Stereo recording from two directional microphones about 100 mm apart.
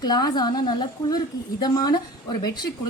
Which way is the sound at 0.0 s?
45° left (ahead or behind).